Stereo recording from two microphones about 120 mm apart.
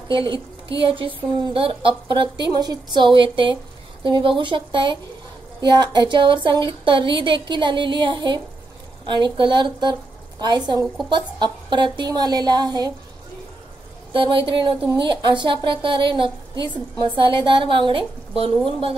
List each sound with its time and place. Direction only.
0.1 s a woman's voice: 45° right (ahead or behind)
14.1 s a woman's voice: 45° right (ahead or behind)